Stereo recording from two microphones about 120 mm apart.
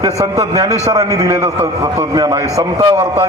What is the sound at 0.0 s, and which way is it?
A man's voice, 30° right (ahead or behind).